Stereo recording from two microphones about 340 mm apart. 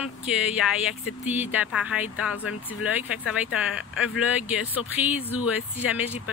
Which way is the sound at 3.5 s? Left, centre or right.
Centre.